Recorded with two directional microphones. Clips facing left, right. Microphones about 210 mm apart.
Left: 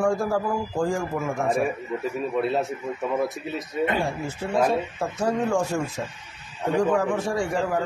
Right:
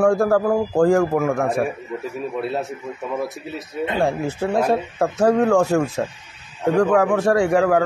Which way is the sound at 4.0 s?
65° right (ahead or behind).